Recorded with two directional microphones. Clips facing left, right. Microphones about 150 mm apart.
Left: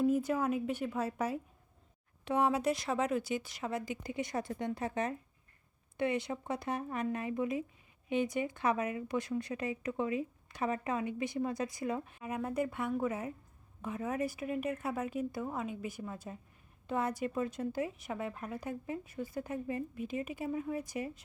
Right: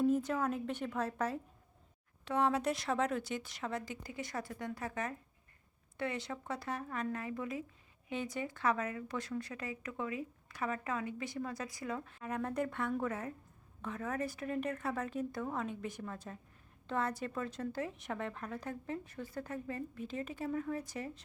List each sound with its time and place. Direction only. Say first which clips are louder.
0.0 s a woman's voice: left 2 dB; 10° left (ahead or behind)